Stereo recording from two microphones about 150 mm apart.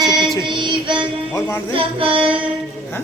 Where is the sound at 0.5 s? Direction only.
35° right (ahead or behind).